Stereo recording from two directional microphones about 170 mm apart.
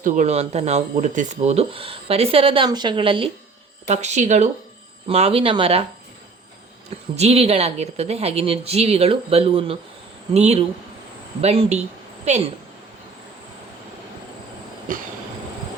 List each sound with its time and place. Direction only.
0.0 s speech: 40° right (ahead or behind)
3.8 s speech: 45° right (ahead or behind)
6.9 s speech: 35° right (ahead or behind)
14.9 s speech: 55° right (ahead or behind)